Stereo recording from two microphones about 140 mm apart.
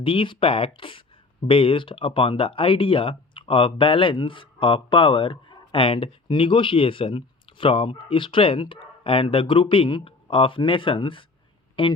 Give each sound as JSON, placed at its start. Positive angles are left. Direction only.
{"t": 0.0, "sound": "speech", "side_deg": 40}